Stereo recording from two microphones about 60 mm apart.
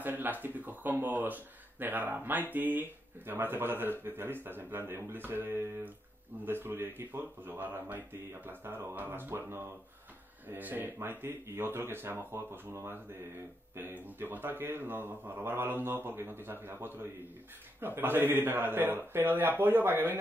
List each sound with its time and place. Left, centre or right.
0.0 s a sound: right
1.0 s speech: right
10.6 s speech: right